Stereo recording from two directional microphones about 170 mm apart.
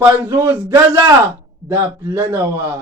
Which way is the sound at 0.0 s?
15° right (ahead or behind).